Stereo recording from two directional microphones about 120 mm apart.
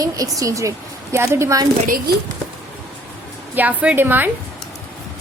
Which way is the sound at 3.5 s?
10° right (ahead or behind).